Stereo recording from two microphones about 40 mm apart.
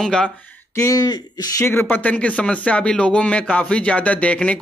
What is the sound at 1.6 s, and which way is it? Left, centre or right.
Speech, left.